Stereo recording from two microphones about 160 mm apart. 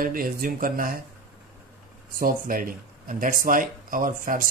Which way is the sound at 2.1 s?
60° right (ahead or behind).